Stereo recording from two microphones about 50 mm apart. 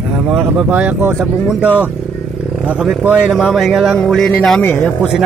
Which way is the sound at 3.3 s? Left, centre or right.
Centre.